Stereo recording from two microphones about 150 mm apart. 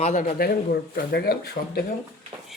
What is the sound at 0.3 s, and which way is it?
Speech, 85° left.